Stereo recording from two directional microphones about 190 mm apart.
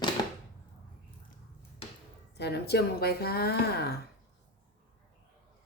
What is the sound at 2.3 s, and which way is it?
Speech, 60° left (ahead or behind).